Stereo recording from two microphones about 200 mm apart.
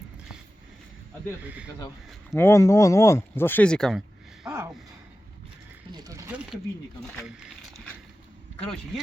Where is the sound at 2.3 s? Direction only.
10° left (ahead or behind).